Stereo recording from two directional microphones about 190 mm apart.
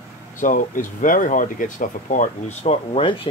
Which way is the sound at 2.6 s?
30° left (ahead or behind).